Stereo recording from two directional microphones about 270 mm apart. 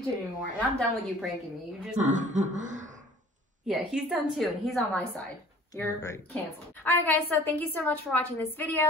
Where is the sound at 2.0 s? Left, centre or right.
Right.